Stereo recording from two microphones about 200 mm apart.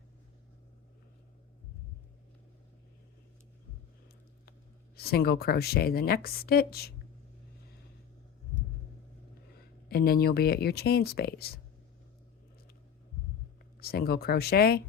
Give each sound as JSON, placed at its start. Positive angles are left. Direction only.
{"t": 4.9, "sound": "speech", "side_deg": 50}
{"t": 9.9, "sound": "speech", "side_deg": 50}
{"t": 13.7, "sound": "speech", "side_deg": 50}